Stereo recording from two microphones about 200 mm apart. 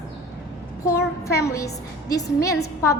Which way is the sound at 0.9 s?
15° left (ahead or behind).